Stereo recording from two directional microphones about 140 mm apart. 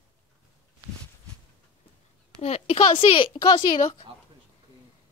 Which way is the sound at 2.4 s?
45° left (ahead or behind).